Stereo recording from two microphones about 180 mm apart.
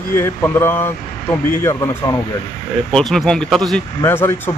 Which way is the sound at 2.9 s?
5° left (ahead or behind).